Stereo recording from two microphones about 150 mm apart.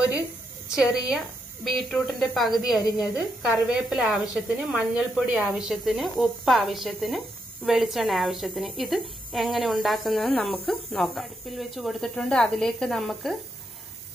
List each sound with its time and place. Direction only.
0.7 s a woman's voice: 5° right (ahead or behind)
2.8 s a woman's voice: 25° left (ahead or behind)
3.4 s a woman's voice: 5° right (ahead or behind)